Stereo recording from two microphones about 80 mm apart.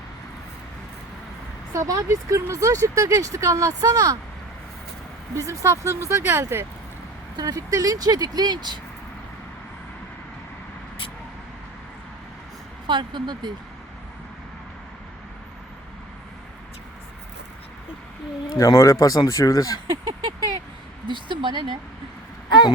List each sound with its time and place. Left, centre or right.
1.7 s speech: right
5.4 s speech: right
7.3 s speech: right
12.9 s speech: right
18.5 s speech: left
19.9 s speech: right
21.1 s speech: right
22.4 s a sound: left